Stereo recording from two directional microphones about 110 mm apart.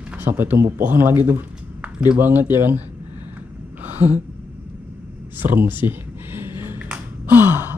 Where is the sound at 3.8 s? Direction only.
15° right (ahead or behind).